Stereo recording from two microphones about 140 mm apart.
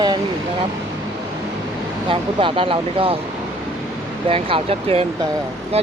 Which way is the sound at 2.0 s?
40° right (ahead or behind).